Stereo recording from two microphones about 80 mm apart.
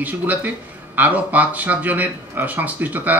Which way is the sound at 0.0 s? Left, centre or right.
Right.